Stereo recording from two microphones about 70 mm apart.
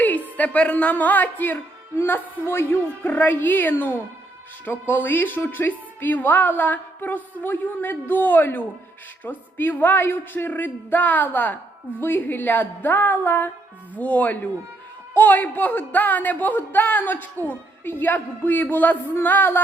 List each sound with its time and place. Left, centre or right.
0.0 s a woman's voice: left
19.1 s music: left